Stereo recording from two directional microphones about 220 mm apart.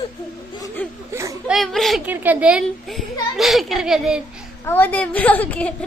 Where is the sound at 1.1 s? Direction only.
10° right (ahead or behind).